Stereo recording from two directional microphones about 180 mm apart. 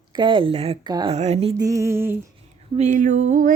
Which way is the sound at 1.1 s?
35° right (ahead or behind).